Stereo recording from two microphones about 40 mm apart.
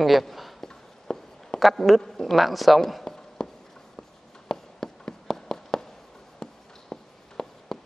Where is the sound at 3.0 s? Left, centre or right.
Centre.